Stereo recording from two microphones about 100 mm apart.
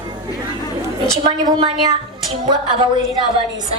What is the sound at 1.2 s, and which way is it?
A woman's voice, 45° right (ahead or behind).